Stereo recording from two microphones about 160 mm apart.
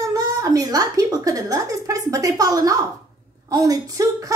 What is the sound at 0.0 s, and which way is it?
A woman's voice, 20° right (ahead or behind).